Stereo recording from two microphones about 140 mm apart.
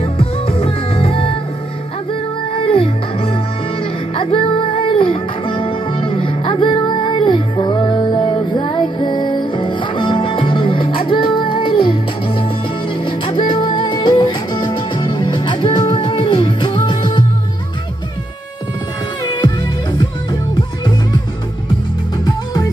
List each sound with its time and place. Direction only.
0.0 s music: 40° left (ahead or behind)
2.6 s music: 40° left (ahead or behind)
19.2 s music: 30° left (ahead or behind)
22.2 s music: 30° left (ahead or behind)